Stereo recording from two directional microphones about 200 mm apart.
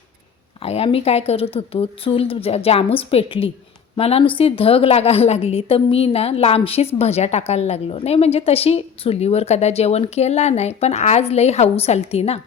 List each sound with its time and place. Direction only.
0.6 s a woman's voice: 30° left (ahead or behind)